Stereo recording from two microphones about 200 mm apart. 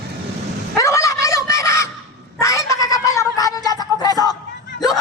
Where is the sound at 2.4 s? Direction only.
15° left (ahead or behind).